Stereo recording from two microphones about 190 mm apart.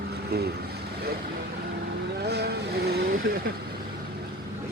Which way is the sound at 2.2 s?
60° right (ahead or behind).